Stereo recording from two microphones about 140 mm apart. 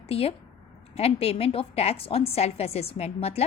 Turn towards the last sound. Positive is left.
turn(degrees=50)  # may be behind; listen again after turning